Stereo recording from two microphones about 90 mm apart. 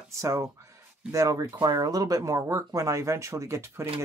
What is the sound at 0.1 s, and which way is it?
Speech, 35° right (ahead or behind).